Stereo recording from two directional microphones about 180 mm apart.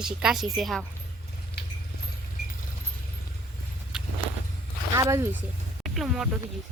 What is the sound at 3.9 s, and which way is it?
Vehicle, 5° right (ahead or behind).